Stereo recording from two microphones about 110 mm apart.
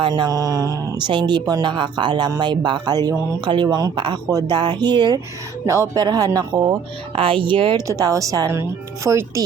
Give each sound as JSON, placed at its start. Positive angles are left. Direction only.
{"t": 0.1, "sound": "speech", "side_deg": -30}
{"t": 0.9, "sound": "speech", "side_deg": -45}
{"t": 5.6, "sound": "speech", "side_deg": -25}
{"t": 7.2, "sound": "speech", "side_deg": -50}
{"t": 7.9, "sound": "speech", "side_deg": -30}